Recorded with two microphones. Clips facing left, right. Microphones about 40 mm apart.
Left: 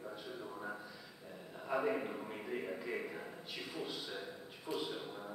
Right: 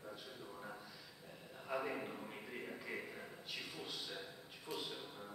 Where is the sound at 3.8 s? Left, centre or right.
Centre.